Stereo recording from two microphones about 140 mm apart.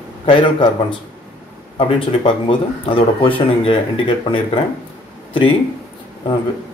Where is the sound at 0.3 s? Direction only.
40° left (ahead or behind).